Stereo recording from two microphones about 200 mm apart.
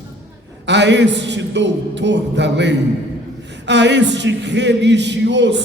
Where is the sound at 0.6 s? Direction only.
60° right (ahead or behind).